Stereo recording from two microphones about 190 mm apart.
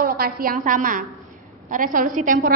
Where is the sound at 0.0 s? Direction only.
50° right (ahead or behind).